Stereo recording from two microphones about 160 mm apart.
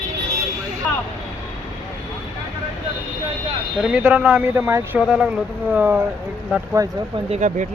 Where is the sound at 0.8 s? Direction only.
5° left (ahead or behind).